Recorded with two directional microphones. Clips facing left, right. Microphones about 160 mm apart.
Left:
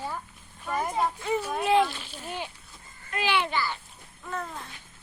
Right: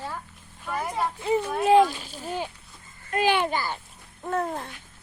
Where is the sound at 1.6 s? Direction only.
40° right (ahead or behind).